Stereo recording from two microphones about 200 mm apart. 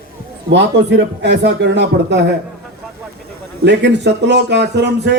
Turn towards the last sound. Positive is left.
turn(degrees=-60)  # may be behind; listen again after turning